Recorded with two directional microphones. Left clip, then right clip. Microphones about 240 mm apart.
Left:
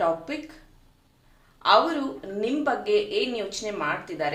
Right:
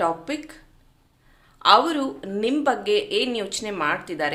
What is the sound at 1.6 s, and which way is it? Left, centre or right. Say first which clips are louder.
A woman's voice: right 3 dB; right.